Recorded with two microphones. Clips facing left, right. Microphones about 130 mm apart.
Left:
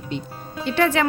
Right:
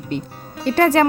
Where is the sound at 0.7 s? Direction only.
40° right (ahead or behind).